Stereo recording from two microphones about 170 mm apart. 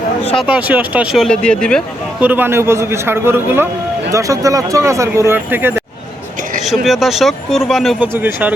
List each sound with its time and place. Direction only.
0.3 s speech: 5° right (ahead or behind)
2.2 s speech: 10° right (ahead or behind)
6.8 s speech: centre (ahead or behind)
8.0 s speech: 10° right (ahead or behind)